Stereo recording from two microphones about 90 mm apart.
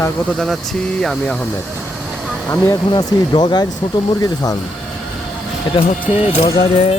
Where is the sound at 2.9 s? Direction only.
45° left (ahead or behind).